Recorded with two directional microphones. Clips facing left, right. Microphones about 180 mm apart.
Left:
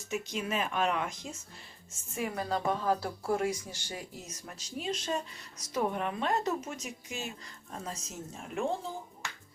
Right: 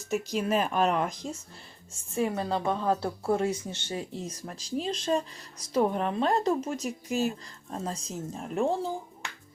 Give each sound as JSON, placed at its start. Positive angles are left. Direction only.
{"t": 0.3, "sound": "speech", "side_deg": -40}